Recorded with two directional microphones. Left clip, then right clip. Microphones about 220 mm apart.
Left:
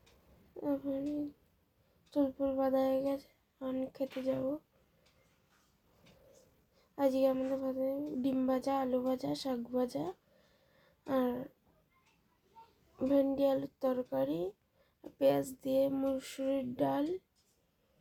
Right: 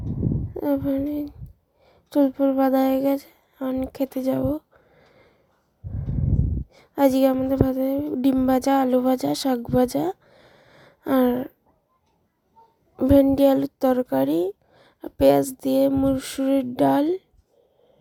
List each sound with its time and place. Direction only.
0.6 s speech: 40° right (ahead or behind)
6.7 s a woman's voice: 45° right (ahead or behind)
13.0 s speech: 45° right (ahead or behind)